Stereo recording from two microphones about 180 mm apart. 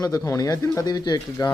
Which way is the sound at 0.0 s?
20° left (ahead or behind).